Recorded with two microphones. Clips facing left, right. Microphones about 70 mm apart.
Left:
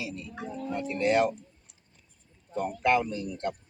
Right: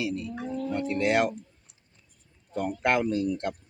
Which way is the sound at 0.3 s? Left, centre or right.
Centre.